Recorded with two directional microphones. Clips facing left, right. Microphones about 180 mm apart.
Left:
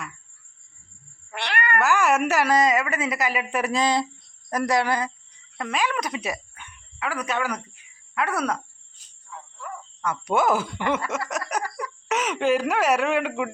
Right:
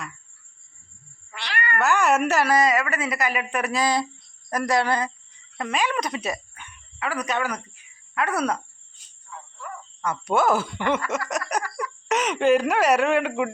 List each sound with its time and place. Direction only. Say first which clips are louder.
1.3 s cat: left 3 dB; 60° left (ahead or behind)
1.8 s speech: right 1 dB; 10° left (ahead or behind)
3.5 s speech: left 1 dB; 5° left (ahead or behind)
3.8 s speech: even; 20° left (ahead or behind); by 8.5 s centre (ahead or behind)
9.3 s a sound: left 1 dB; 5° left (ahead or behind)
10.2 s speech: right 1 dB; 15° left (ahead or behind)